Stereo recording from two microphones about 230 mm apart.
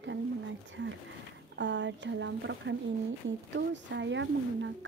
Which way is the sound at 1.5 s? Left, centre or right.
Right.